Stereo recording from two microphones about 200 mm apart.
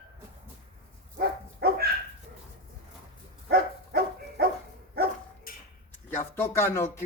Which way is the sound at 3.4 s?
50° right (ahead or behind).